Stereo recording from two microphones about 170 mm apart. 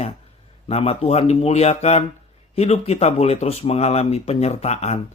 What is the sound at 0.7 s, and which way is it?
Speech, 35° left (ahead or behind).